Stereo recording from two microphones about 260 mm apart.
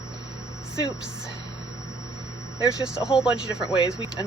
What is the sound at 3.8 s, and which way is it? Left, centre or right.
Speech, centre.